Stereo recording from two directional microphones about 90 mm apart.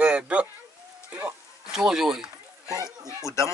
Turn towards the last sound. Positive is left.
turn(degrees=-45)  # may be behind; listen again after turning